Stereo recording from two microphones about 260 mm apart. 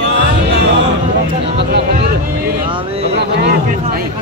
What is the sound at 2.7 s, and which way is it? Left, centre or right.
Speech, right.